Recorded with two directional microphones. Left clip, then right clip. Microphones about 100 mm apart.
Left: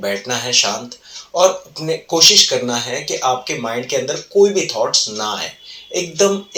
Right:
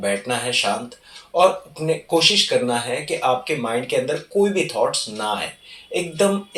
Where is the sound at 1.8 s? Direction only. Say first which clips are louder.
Left 5 dB; 25° left (ahead or behind).